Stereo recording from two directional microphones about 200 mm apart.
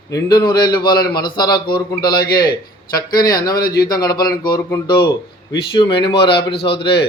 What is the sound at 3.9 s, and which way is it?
A man's voice, 20° left (ahead or behind).